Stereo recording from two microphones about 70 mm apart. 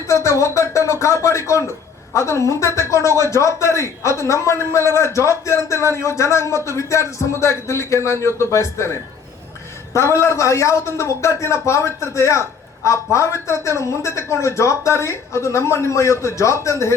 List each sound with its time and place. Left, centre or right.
0.1 s a man's voice: left
9.9 s a man's voice: left